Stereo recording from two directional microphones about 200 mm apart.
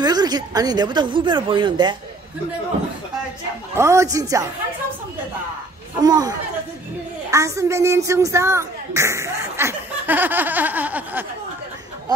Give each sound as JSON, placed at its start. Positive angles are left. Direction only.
{"t": 0.0, "sound": "a woman's voice", "side_deg": -20}
{"t": 3.7, "sound": "speech", "side_deg": -15}
{"t": 5.9, "sound": "a woman's voice", "side_deg": -20}